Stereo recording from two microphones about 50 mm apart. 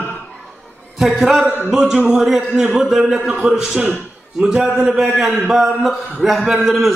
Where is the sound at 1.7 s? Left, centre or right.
Centre.